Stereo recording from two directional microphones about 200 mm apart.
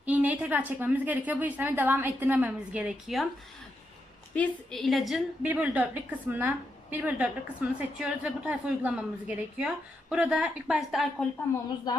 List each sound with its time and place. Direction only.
0.0 s a woman's voice: 10° right (ahead or behind)
4.4 s a woman's voice: centre (ahead or behind)
11.9 s a sound: 20° left (ahead or behind)